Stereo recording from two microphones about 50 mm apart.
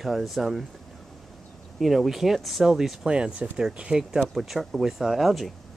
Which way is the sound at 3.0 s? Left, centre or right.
Centre.